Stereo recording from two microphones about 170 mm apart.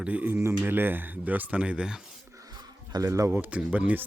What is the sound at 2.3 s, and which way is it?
Speech, 20° right (ahead or behind).